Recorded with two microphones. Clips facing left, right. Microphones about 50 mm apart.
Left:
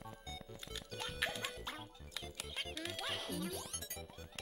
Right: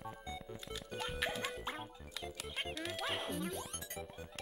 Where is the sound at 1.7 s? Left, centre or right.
Centre.